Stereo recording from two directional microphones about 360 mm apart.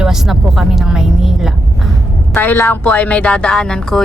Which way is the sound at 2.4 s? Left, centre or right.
Centre.